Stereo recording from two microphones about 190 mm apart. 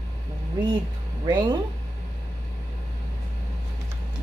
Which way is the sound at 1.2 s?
20° right (ahead or behind).